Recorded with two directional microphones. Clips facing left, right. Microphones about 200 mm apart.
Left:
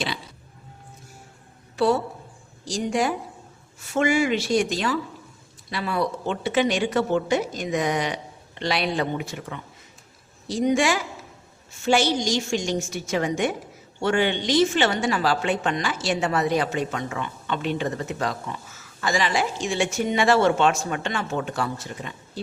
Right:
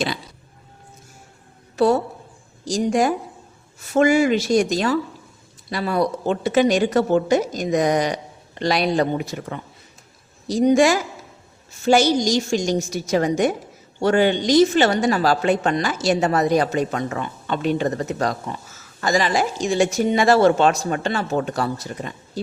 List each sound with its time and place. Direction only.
1.7 s a woman's voice: 45° right (ahead or behind)